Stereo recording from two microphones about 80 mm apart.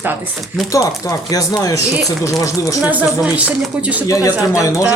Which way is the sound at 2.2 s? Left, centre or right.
Left.